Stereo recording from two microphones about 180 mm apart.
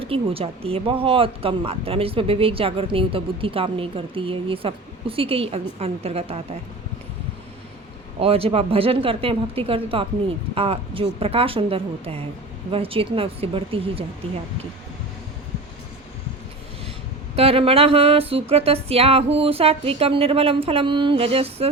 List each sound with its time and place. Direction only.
0.0 s speech: 30° right (ahead or behind)
8.2 s speech: 30° right (ahead or behind)
17.3 s speech: 35° right (ahead or behind)